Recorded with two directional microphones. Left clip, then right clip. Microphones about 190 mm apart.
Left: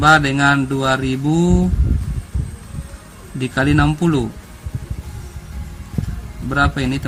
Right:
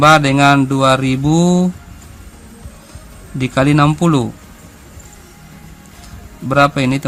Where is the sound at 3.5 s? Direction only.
40° right (ahead or behind).